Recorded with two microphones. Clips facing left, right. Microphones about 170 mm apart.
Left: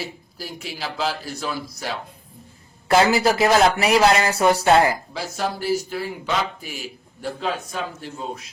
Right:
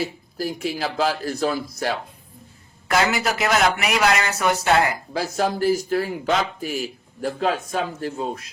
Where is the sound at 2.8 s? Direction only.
30° left (ahead or behind).